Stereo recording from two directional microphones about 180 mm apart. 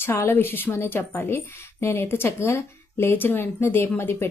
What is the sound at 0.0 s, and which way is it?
Speech, 15° left (ahead or behind).